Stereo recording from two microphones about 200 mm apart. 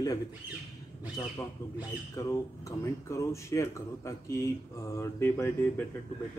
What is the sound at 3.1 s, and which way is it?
A man's voice, 15° left (ahead or behind).